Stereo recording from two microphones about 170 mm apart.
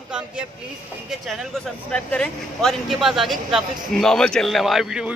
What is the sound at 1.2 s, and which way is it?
Speech, centre (ahead or behind).